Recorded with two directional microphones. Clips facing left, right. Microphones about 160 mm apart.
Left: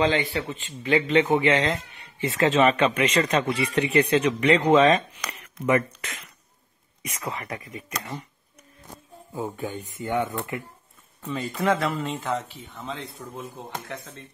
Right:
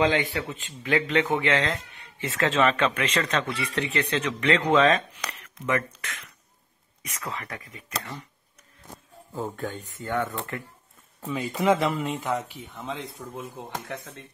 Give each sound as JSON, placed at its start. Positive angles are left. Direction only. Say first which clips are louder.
{"t": 0.0, "sound": "a man's voice", "louder": "left 1 dB", "side_deg": -10}
{"t": 5.7, "sound": "speech", "louder": "left 5 dB", "side_deg": 25}
{"t": 9.3, "sound": "speech", "louder": "left 1 dB", "side_deg": 10}
{"t": 11.2, "sound": "a man's voice", "louder": "even", "side_deg": -5}
{"t": 11.5, "sound": "speech", "louder": "right 2 dB", "side_deg": -15}